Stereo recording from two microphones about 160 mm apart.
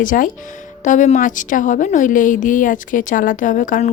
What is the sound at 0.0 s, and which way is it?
A woman's voice, 55° left (ahead or behind).